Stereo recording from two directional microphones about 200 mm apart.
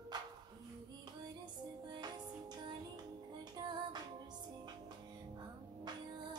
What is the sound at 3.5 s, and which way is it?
Music, 20° right (ahead or behind).